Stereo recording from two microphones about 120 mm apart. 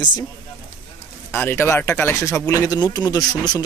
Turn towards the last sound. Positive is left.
turn(degrees=30)  # may be behind; listen again after turning